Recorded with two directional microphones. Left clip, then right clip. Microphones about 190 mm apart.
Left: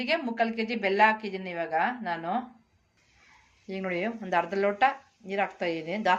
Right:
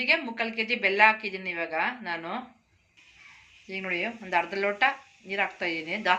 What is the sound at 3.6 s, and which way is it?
Speech, 30° left (ahead or behind).